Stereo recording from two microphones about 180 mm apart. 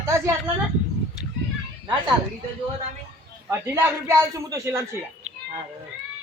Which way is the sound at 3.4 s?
15° right (ahead or behind).